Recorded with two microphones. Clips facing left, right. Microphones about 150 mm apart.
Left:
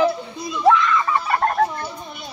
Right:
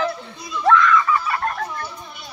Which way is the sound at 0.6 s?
20° left (ahead or behind).